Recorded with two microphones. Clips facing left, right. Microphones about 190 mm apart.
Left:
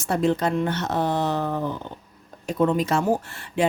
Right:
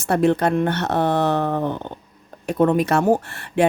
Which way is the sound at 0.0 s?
65° right (ahead or behind).